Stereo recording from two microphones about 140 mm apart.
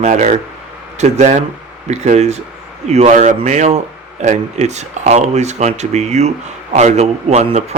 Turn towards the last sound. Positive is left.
turn(degrees=-50)  # may be behind; listen again after turning